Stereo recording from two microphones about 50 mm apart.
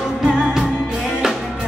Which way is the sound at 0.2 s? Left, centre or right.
Centre.